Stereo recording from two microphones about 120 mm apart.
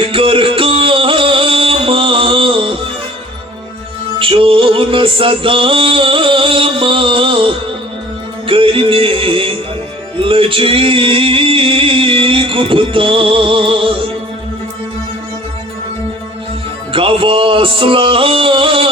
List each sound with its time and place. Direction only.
0.0 s music: 45° right (ahead or behind)
4.2 s music: 50° right (ahead or behind)
16.9 s music: 45° right (ahead or behind)